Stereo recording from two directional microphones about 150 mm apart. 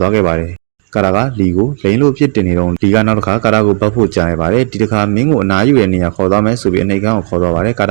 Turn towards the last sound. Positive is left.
turn(degrees=-10)  # may be behind; listen again after turning